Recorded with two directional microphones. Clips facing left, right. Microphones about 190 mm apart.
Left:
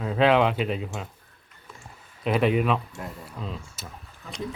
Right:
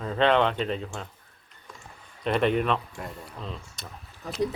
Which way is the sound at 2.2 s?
5° left (ahead or behind).